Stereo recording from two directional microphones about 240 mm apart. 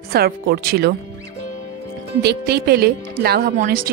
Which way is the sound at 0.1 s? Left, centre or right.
Right.